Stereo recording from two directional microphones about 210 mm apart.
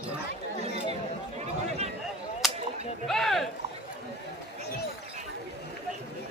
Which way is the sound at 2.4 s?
Centre (ahead or behind).